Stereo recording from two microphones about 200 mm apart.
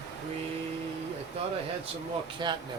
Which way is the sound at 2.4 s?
20° right (ahead or behind).